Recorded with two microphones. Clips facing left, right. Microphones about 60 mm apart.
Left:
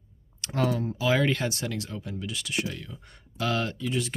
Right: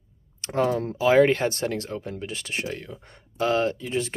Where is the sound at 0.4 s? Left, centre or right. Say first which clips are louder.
Right 3 dB; right.